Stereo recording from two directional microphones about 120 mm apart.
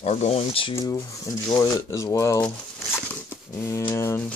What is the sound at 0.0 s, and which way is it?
Speech, 65° left (ahead or behind).